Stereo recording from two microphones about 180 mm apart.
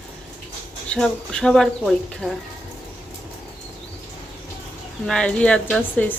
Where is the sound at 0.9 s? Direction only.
5° left (ahead or behind).